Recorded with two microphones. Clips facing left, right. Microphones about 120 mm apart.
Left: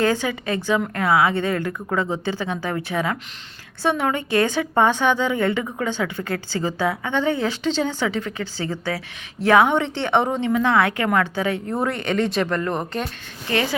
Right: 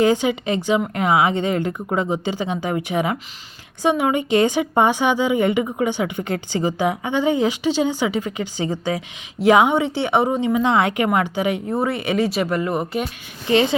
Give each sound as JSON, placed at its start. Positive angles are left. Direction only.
{"t": 0.0, "sound": "a woman's voice", "side_deg": -15}
{"t": 13.5, "sound": "speech", "side_deg": -20}